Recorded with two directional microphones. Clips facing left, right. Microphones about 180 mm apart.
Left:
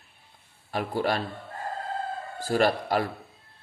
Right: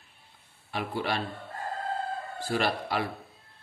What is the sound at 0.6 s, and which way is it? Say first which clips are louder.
Speech: left 4 dB; 40° left (ahead or behind).